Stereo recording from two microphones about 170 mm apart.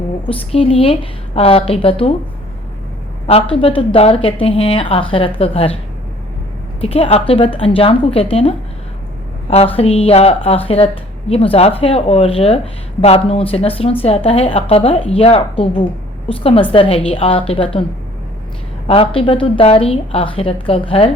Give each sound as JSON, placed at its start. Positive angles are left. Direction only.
{"t": 0.3, "sound": "a woman's voice", "side_deg": 35}
{"t": 3.2, "sound": "a woman's voice", "side_deg": 35}
{"t": 6.8, "sound": "a woman's voice", "side_deg": 35}
{"t": 18.9, "sound": "a woman's voice", "side_deg": 35}